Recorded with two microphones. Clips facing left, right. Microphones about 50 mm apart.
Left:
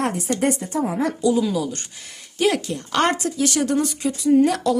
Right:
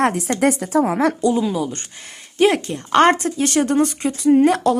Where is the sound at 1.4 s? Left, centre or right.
Right.